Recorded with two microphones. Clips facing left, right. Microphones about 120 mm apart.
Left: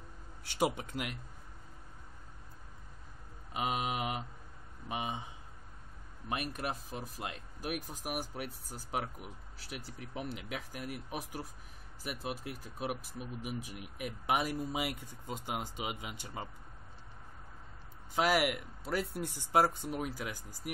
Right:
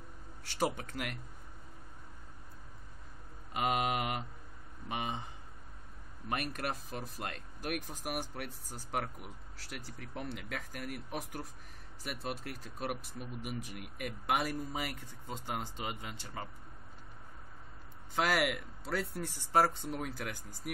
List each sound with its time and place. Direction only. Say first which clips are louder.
0.5 s speech: left 2 dB; 15° left (ahead or behind)
3.5 s speech: right 2 dB; centre (ahead or behind)
6.2 s speech: even; 5° left (ahead or behind)
18.1 s speech: left 2 dB; 10° left (ahead or behind)